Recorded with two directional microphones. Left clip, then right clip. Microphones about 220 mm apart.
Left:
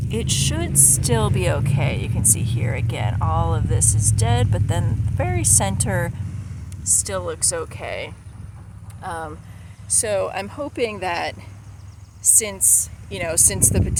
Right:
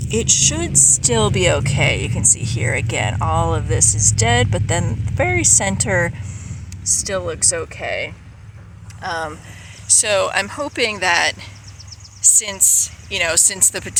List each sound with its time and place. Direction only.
0.1 s speech: 20° right (ahead or behind)
9.8 s speech: 5° left (ahead or behind)